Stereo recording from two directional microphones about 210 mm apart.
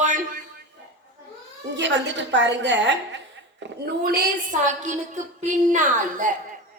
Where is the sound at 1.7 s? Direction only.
60° right (ahead or behind).